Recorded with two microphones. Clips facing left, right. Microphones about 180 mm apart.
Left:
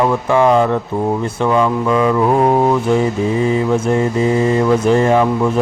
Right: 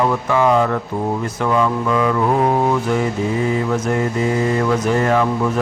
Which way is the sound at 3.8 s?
25° left (ahead or behind).